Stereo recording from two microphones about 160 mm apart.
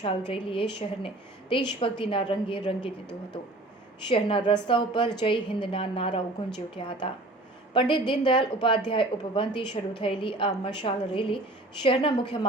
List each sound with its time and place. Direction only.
0.0 s a woman's voice: 30° left (ahead or behind)
4.1 s a woman's voice: 35° left (ahead or behind)